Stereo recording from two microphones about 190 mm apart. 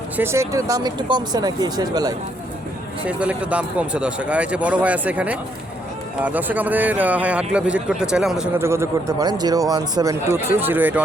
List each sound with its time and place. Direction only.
0.2 s speech: 15° right (ahead or behind)
3.1 s a man's voice: 5° right (ahead or behind)
8.5 s a man's voice: 15° right (ahead or behind)